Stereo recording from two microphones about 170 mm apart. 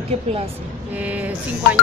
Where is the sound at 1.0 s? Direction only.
10° right (ahead or behind).